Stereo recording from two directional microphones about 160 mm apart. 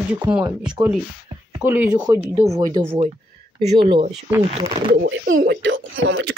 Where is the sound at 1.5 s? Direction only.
15° right (ahead or behind).